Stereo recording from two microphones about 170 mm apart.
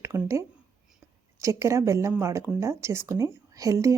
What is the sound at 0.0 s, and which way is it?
A woman's voice, 15° right (ahead or behind).